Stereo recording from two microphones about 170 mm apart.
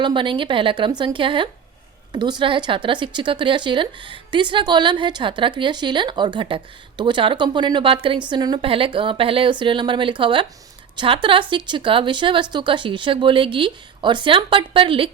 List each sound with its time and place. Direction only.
0.0 s speech: 30° right (ahead or behind)